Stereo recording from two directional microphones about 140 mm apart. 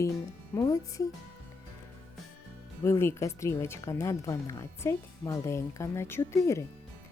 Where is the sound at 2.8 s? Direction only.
20° left (ahead or behind).